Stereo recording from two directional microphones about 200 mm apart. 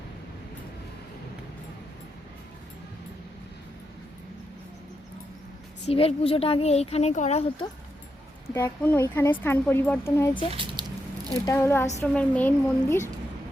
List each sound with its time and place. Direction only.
5.8 s speech: 30° left (ahead or behind)
8.5 s speech: 10° left (ahead or behind)
10.5 s squish: 25° right (ahead or behind)
11.4 s speech: 15° left (ahead or behind)